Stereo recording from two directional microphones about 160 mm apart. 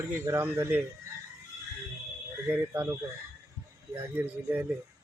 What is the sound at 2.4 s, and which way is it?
Speech, 15° right (ahead or behind).